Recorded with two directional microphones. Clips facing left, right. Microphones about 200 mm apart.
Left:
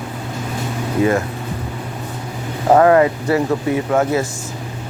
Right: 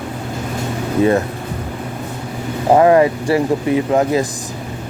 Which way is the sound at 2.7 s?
20° right (ahead or behind).